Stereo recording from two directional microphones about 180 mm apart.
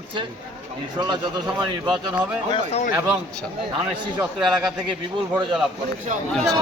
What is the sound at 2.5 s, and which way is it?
Speech, 35° left (ahead or behind).